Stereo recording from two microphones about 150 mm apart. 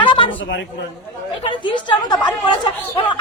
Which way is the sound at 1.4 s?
30° left (ahead or behind).